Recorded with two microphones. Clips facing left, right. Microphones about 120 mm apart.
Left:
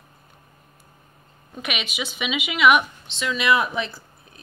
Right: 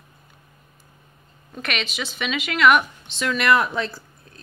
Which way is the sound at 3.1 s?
50° right (ahead or behind).